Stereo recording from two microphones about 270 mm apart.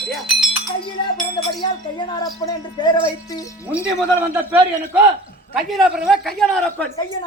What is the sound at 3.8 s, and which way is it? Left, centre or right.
A man's voice, centre.